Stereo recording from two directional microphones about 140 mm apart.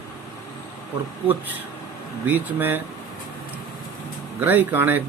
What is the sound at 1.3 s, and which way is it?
Speech, 10° right (ahead or behind).